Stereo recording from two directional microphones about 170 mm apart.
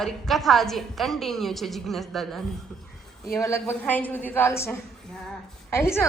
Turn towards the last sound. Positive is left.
turn(degrees=15)  # may be behind; listen again after turning